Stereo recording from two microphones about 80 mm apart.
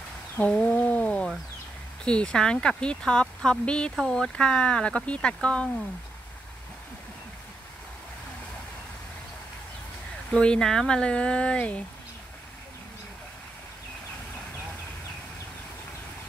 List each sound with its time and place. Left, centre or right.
0.4 s a sound: centre
2.0 s speech: centre
10.3 s speech: centre